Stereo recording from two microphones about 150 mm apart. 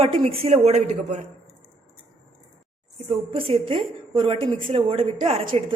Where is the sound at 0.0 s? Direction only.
40° right (ahead or behind).